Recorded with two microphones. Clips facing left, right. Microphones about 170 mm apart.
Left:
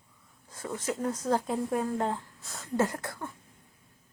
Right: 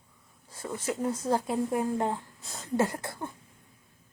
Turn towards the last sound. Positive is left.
turn(degrees=-20)  # may be behind; listen again after turning